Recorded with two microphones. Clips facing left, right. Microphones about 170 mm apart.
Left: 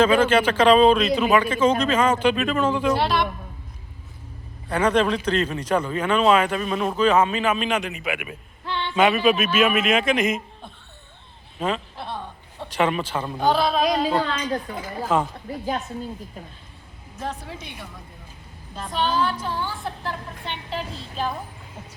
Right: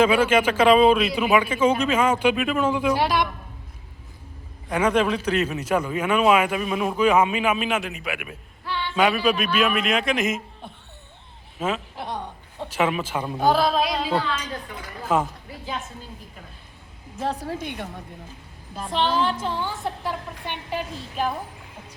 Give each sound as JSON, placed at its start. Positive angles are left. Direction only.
{"t": 0.0, "sound": "speech", "side_deg": -10}
{"t": 4.7, "sound": "a man's voice", "side_deg": -10}
{"t": 11.6, "sound": "a man's voice", "side_deg": -5}
{"t": 11.9, "sound": "a man's voice", "side_deg": -15}
{"t": 15.1, "sound": "speech", "side_deg": -10}
{"t": 17.2, "sound": "speech", "side_deg": -35}
{"t": 18.9, "sound": "a woman's voice", "side_deg": -25}
{"t": 20.1, "sound": "speech", "side_deg": -15}